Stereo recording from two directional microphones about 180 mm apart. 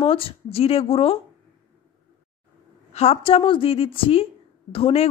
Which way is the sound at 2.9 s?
35° left (ahead or behind).